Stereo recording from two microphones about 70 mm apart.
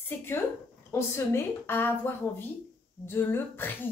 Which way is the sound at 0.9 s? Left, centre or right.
Left.